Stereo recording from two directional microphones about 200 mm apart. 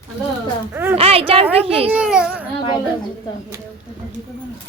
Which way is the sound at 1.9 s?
5° right (ahead or behind).